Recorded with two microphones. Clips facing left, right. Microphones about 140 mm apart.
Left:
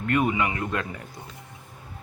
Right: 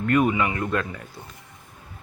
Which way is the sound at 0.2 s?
20° left (ahead or behind).